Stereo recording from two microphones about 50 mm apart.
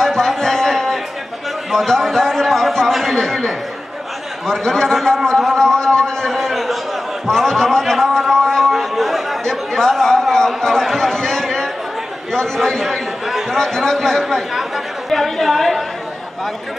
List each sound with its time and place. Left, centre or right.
0.0 s a sound: centre
0.4 s music: centre
1.7 s a man's voice: centre
8.3 s a sound: centre
9.4 s chatter: centre
12.5 s a man's voice: centre